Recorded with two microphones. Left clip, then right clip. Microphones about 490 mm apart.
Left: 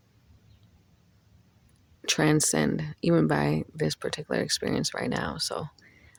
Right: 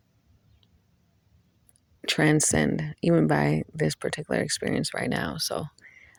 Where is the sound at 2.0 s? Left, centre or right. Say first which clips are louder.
Right 1 dB; right.